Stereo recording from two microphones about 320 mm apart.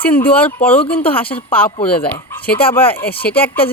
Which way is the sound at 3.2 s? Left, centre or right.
Centre.